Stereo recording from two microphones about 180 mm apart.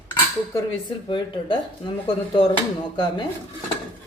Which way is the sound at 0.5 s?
25° left (ahead or behind).